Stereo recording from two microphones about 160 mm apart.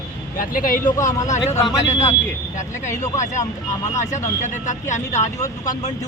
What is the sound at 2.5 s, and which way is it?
Speech, 50° left (ahead or behind).